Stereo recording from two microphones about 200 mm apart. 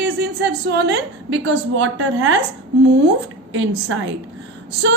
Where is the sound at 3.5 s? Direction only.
65° right (ahead or behind).